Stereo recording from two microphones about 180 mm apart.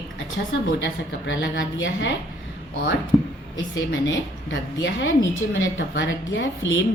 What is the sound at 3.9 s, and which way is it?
A woman's voice, 90° left.